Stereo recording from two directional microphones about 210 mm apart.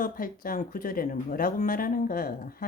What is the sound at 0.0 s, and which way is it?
Speech, 40° left (ahead or behind).